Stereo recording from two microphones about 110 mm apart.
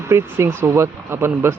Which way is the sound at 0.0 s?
25° right (ahead or behind).